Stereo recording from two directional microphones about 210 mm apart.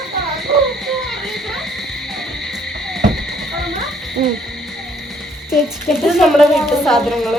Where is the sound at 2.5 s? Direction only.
Centre (ahead or behind).